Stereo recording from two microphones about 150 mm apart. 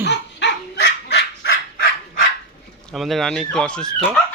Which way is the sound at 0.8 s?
90° left.